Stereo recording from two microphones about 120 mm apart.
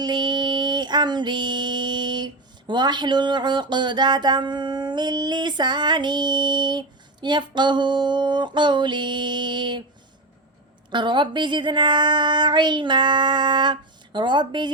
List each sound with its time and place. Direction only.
0.0 s female singing: 35° right (ahead or behind)
10.9 s speech: 40° right (ahead or behind)